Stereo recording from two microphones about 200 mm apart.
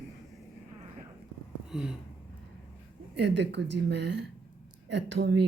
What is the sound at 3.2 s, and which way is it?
Speech, 60° right (ahead or behind).